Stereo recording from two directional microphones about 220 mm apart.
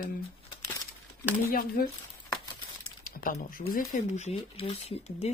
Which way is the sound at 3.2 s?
40° left (ahead or behind).